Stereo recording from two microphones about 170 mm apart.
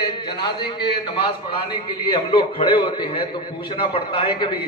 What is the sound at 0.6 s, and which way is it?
A man's voice, 30° left (ahead or behind).